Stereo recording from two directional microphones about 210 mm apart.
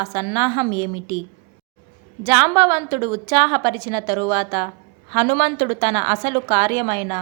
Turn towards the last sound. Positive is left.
turn(degrees=-20)  # may be behind; listen again after turning